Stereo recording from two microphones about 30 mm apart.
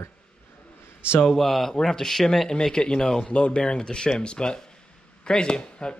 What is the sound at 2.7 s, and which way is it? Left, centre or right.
Speech, left.